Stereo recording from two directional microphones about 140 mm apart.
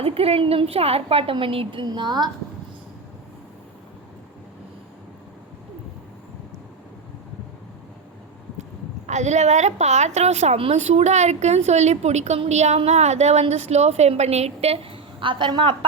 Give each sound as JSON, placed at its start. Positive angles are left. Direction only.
{"t": 0.0, "sound": "a woman's voice", "side_deg": -45}
{"t": 9.0, "sound": "a woman's voice", "side_deg": -55}